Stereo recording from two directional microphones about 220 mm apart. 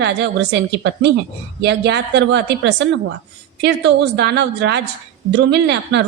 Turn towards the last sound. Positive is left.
turn(degrees=-50)  # may be behind; listen again after turning